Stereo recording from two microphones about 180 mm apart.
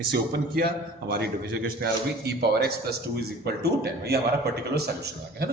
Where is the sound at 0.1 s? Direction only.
60° right (ahead or behind).